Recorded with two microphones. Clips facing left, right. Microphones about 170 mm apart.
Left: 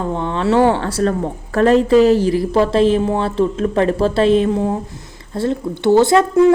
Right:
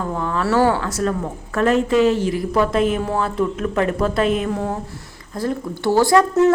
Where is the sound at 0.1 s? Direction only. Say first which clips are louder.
Left 3 dB; 25° left (ahead or behind).